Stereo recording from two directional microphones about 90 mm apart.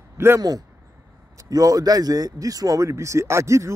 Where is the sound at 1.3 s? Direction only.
40° right (ahead or behind).